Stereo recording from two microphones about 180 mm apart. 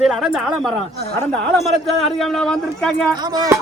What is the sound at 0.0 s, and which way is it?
Speech, centre (ahead or behind).